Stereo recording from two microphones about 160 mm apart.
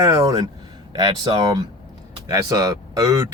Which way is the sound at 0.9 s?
25° right (ahead or behind).